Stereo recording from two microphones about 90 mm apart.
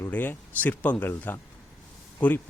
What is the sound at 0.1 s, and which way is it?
Speech, 20° left (ahead or behind).